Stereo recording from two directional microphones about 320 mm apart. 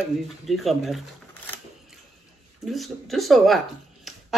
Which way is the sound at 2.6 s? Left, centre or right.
Centre.